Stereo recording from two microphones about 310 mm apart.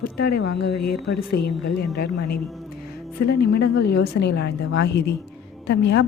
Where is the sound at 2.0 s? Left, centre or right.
Left.